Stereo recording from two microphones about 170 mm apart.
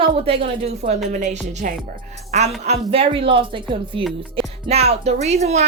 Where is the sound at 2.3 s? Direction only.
40° right (ahead or behind).